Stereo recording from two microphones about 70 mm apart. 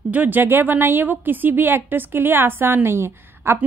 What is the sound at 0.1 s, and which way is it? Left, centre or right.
A woman's voice, right.